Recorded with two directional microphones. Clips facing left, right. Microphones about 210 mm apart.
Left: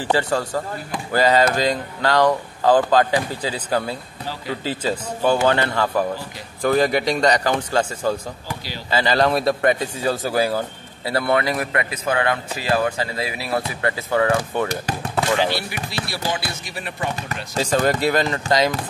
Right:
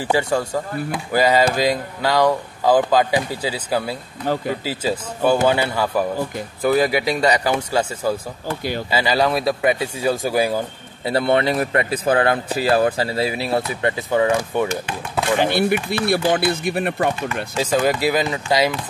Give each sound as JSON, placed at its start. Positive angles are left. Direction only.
{"t": 0.0, "sound": "speech", "side_deg": -10}
{"t": 4.2, "sound": "speech", "side_deg": -50}
{"t": 4.6, "sound": "speech", "side_deg": -10}
{"t": 11.1, "sound": "a man's voice", "side_deg": -25}
{"t": 13.8, "sound": "speech", "side_deg": -20}
{"t": 15.3, "sound": "speech", "side_deg": -55}
{"t": 17.6, "sound": "speech", "side_deg": -5}